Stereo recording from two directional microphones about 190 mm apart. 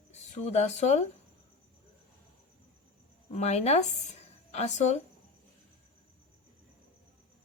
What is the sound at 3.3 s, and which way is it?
Speech, 35° left (ahead or behind).